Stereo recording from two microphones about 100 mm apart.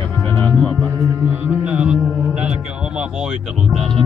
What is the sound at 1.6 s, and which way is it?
Music, 10° right (ahead or behind).